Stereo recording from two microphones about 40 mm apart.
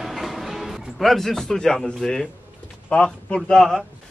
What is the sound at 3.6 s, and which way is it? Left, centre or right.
Speech, centre.